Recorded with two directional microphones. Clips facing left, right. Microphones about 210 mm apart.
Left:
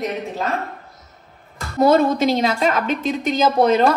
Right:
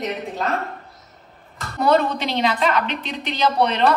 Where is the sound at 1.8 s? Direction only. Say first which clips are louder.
Left 4 dB; 45° left (ahead or behind).